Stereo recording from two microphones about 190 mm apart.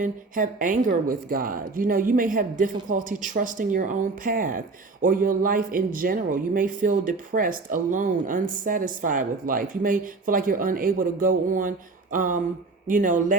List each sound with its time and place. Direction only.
0.0 s speech: 45° right (ahead or behind)